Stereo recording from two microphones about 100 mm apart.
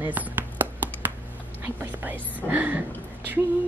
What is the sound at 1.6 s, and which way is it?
Whispering, 20° right (ahead or behind).